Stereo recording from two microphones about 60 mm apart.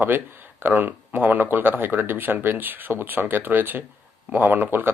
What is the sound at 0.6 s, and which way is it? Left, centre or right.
Speech, right.